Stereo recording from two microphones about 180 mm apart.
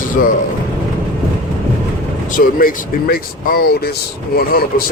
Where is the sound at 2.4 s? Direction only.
55° left (ahead or behind).